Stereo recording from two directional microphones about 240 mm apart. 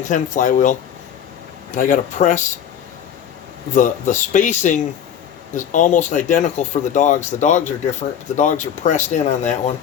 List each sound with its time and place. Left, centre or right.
0.1 s speech: left
3.8 s speech: left